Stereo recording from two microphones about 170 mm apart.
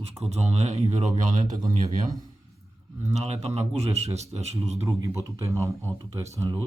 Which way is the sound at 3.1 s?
40° right (ahead or behind).